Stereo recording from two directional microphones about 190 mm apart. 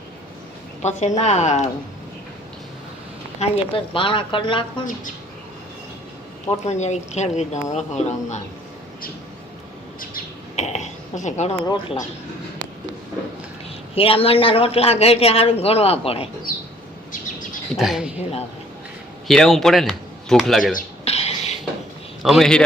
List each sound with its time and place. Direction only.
0.8 s a woman's voice: 35° left (ahead or behind)
3.4 s a woman's voice: 25° left (ahead or behind)
6.7 s a woman's voice: 35° left (ahead or behind)
10.5 s a sound: 35° left (ahead or behind)
11.6 s a woman's voice: 20° left (ahead or behind)
13.9 s a woman's voice: 30° left (ahead or behind)
17.1 s chirp: 45° left (ahead or behind)
17.7 s speech: centre (ahead or behind)
18.2 s a woman's voice: 35° left (ahead or behind)
19.3 s speech: centre (ahead or behind)
20.7 s a sound: 35° left (ahead or behind)
22.2 s speech: centre (ahead or behind)